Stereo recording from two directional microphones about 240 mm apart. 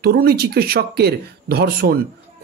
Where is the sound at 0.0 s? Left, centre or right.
Right.